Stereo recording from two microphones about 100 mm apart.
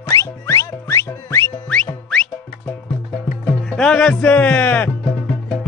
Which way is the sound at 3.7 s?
10° left (ahead or behind).